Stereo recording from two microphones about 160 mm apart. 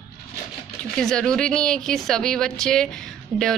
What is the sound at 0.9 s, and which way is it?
A woman's voice, 5° left (ahead or behind).